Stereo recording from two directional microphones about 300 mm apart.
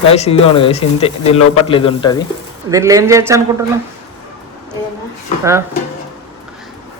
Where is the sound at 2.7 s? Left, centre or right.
Centre.